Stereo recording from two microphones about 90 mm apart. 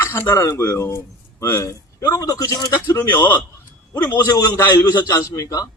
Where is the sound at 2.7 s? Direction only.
30° left (ahead or behind).